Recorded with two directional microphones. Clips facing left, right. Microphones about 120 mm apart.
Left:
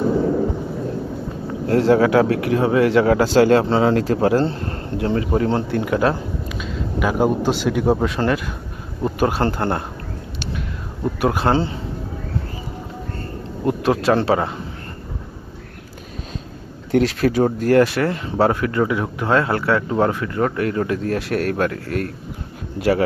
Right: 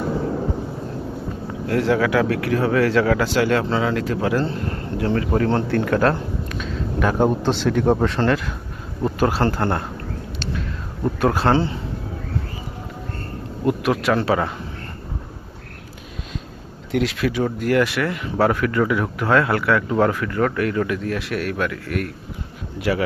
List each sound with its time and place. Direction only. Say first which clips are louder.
1.6 s speech: left 4 dB; 30° left (ahead or behind)
11.2 s speech: even; 15° left (ahead or behind)
13.7 s speech: left 2 dB; 30° left (ahead or behind)
16.9 s speech: left 4 dB; 40° left (ahead or behind)